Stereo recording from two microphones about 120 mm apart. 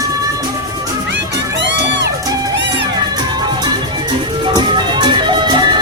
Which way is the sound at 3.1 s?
35° right (ahead or behind).